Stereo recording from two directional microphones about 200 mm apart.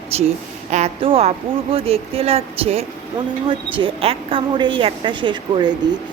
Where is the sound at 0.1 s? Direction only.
30° right (ahead or behind).